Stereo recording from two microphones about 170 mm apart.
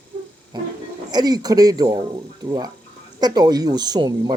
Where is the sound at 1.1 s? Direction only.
25° right (ahead or behind).